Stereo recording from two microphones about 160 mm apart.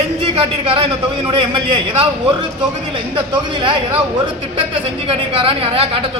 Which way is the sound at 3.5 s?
30° right (ahead or behind).